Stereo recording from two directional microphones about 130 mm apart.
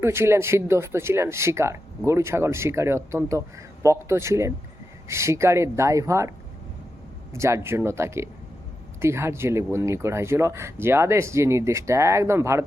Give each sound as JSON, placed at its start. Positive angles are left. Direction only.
{"t": 0.0, "sound": "speech", "side_deg": -20}
{"t": 7.3, "sound": "speech", "side_deg": -20}